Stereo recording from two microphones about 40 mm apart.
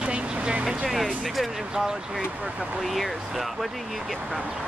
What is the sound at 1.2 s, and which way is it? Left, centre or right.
Speech, centre.